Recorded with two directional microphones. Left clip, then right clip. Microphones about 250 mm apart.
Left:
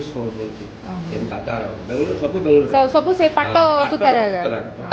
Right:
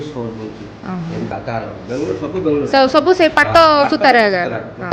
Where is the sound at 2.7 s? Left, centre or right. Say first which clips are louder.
Right 3 dB; right.